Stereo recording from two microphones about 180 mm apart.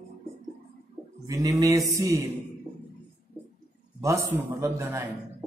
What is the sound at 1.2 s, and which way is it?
Speech, 20° right (ahead or behind).